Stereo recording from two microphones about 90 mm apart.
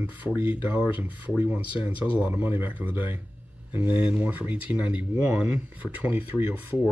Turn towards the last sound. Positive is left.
turn(degrees=-20)  # may be behind; listen again after turning